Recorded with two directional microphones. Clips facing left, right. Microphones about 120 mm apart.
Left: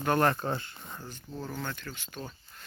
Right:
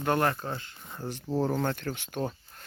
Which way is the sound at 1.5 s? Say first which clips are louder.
Right 8 dB; 55° right (ahead or behind).